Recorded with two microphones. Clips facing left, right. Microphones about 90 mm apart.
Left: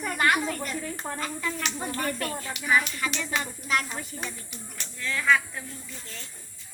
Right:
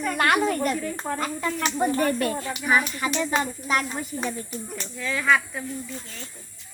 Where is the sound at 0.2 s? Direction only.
70° right (ahead or behind).